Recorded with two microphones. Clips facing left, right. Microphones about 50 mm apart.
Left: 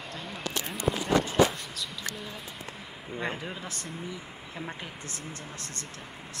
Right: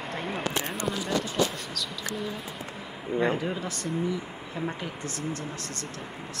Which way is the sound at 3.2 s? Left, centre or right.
Centre.